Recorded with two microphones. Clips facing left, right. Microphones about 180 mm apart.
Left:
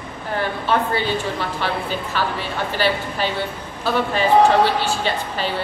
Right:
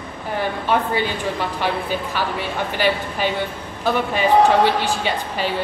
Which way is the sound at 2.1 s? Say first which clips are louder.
Left 3 dB; 10° right (ahead or behind).